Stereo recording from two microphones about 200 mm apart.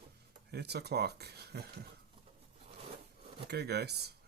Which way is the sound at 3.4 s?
55° right (ahead or behind).